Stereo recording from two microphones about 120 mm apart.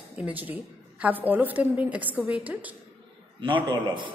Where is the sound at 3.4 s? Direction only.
40° right (ahead or behind).